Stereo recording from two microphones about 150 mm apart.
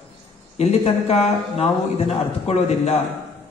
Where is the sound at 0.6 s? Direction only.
45° left (ahead or behind).